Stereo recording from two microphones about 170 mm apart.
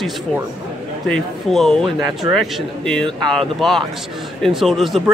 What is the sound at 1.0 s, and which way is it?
Speech, centre (ahead or behind).